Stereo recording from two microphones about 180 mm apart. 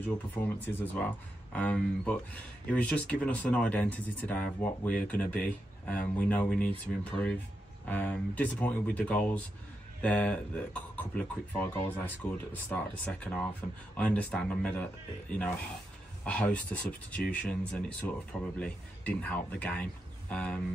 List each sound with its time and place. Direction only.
0.0 s speech: 10° left (ahead or behind)